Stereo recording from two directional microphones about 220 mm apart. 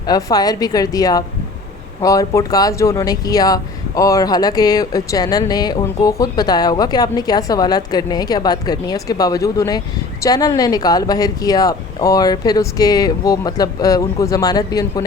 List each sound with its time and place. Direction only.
0.1 s speech: 15° left (ahead or behind)